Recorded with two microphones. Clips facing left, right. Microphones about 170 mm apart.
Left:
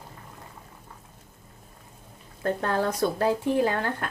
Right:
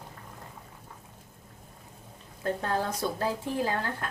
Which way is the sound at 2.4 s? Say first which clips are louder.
Left 4 dB; 70° left (ahead or behind).